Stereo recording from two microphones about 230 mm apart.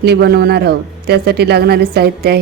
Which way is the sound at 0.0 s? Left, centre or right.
Right.